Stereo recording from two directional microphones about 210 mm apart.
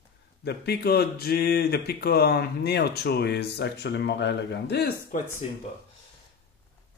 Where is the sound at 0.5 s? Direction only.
50° left (ahead or behind).